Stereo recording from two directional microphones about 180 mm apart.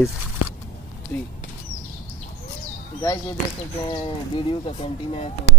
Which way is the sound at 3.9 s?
25° left (ahead or behind).